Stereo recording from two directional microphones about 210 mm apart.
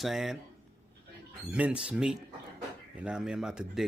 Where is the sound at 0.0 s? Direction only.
Centre (ahead or behind).